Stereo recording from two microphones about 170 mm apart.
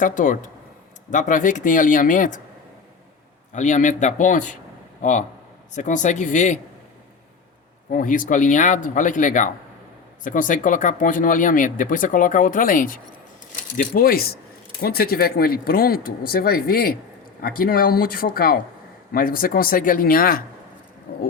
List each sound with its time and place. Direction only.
0.0 s speech: 50° left (ahead or behind)
3.5 s speech: 45° left (ahead or behind)
7.9 s speech: 50° left (ahead or behind)
21.1 s a sound: 60° left (ahead or behind)